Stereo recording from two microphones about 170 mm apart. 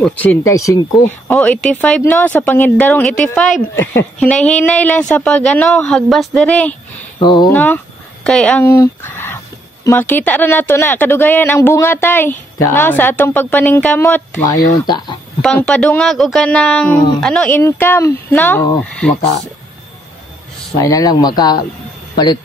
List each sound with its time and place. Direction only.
0.0 s speech: 10° left (ahead or behind)
1.3 s speech: 5° left (ahead or behind)
4.2 s speech: 5° left (ahead or behind)
8.6 s speech: 15° left (ahead or behind)
14.5 s speech: 25° left (ahead or behind)
15.4 s speech: 5° left (ahead or behind)
17.6 s speech: 15° left (ahead or behind)
20.7 s speech: 20° left (ahead or behind)